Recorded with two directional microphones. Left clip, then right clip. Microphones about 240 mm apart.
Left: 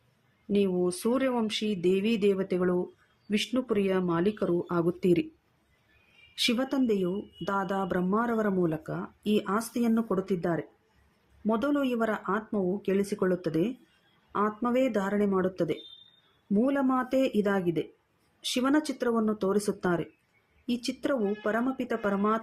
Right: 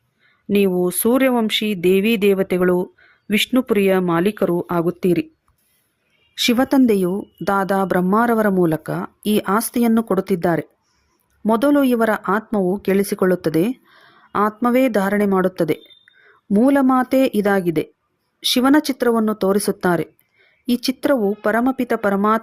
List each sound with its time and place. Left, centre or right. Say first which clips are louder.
0.5 s a woman's voice: right 10 dB; right
6.3 s a woman's voice: right 11 dB; right